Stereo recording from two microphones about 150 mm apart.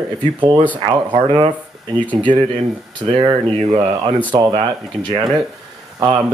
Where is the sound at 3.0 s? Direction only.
30° right (ahead or behind).